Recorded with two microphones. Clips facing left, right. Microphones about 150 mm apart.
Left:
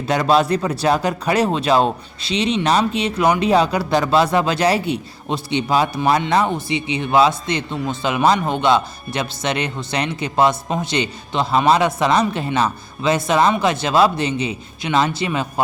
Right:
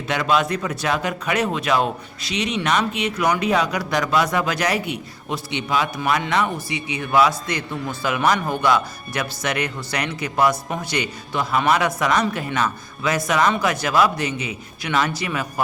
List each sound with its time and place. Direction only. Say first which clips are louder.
0.1 s a man's voice: left 4 dB; 35° left (ahead or behind)